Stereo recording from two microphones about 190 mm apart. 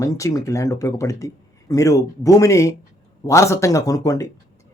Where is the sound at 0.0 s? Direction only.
15° left (ahead or behind).